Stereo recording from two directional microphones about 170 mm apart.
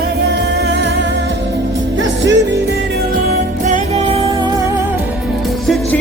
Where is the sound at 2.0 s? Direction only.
90° right.